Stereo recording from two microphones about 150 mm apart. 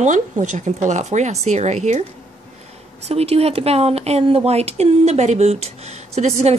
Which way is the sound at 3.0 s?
45° right (ahead or behind).